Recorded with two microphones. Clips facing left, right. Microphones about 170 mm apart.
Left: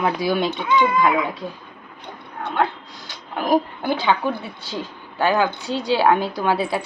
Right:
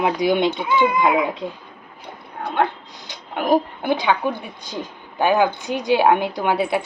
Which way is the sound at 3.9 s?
15° right (ahead or behind).